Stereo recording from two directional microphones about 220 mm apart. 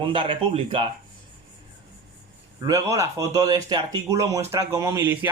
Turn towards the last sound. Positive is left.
turn(degrees=-10)  # may be behind; listen again after turning